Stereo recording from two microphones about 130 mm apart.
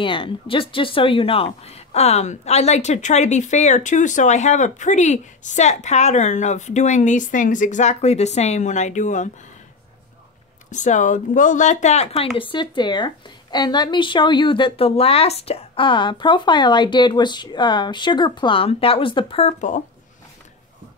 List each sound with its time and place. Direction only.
0.0 s speech: 40° left (ahead or behind); by 9.3 s 70° left (ahead or behind)
10.7 s speech: 70° left (ahead or behind)
12.4 s speech: 40° left (ahead or behind); by 19.8 s 60° left (ahead or behind)